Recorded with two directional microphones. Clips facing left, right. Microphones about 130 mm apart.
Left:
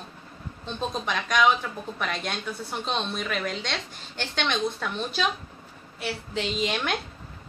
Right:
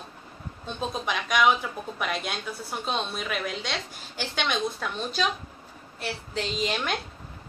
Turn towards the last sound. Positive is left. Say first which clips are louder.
# left 1 dB
turn(degrees=0)  # may be behind; listen again after turning